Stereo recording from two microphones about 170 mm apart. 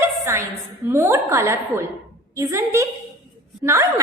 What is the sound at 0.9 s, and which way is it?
A woman's voice, 15° right (ahead or behind).